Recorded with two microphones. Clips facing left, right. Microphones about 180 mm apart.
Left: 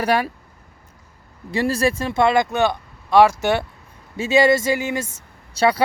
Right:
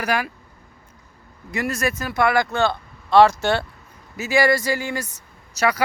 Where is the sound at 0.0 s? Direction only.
30° left (ahead or behind).